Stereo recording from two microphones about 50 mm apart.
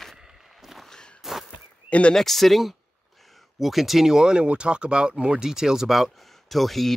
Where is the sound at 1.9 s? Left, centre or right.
Left.